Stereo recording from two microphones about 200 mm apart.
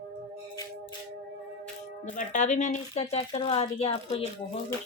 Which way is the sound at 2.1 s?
40° left (ahead or behind).